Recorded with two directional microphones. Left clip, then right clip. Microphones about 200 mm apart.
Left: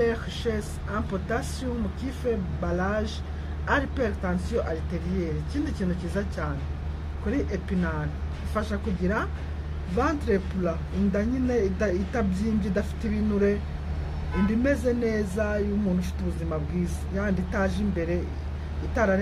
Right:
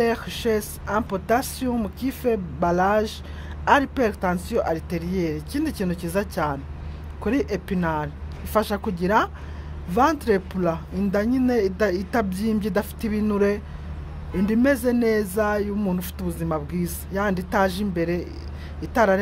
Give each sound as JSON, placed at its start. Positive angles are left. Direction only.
{"t": 0.0, "sound": "speech", "side_deg": -50}
{"t": 14.6, "sound": "speech", "side_deg": -55}